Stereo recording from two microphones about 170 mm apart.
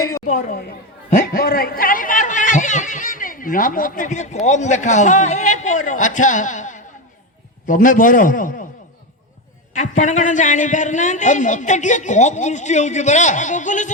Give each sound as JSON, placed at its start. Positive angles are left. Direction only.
{"t": 0.3, "sound": "a man's voice", "side_deg": 45}
{"t": 9.7, "sound": "a man's voice", "side_deg": 45}